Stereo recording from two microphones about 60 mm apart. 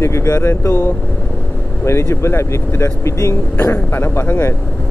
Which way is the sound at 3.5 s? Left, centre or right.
Left.